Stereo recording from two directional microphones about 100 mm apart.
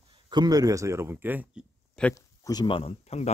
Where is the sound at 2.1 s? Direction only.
40° left (ahead or behind).